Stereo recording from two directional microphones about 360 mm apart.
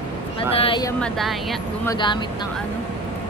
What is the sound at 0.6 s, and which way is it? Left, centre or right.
Speech, centre.